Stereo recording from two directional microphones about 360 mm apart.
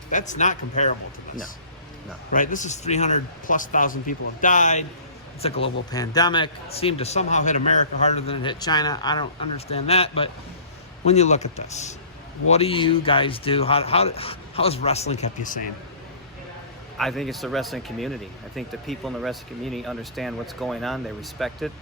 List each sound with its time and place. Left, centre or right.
0.1 s speech: left
2.3 s speech: left
17.0 s speech: centre